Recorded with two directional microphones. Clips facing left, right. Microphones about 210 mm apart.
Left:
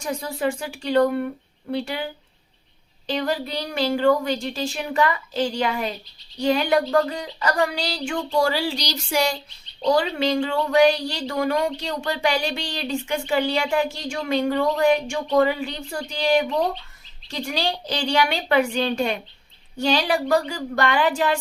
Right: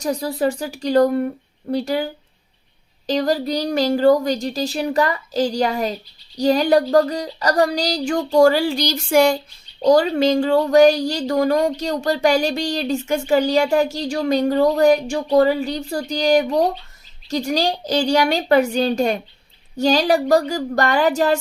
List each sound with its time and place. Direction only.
0.0 s speech: 40° right (ahead or behind)
3.1 s speech: 40° right (ahead or behind)
9.8 s speech: 40° right (ahead or behind)